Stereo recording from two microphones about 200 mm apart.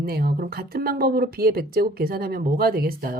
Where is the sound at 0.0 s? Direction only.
50° right (ahead or behind).